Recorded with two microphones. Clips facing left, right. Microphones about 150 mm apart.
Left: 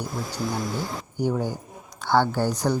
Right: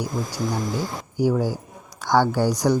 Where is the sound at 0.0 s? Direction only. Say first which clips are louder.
Right 3 dB; 10° right (ahead or behind).